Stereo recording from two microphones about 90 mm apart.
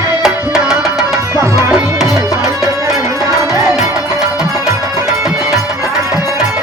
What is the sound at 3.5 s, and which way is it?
Music, 30° right (ahead or behind).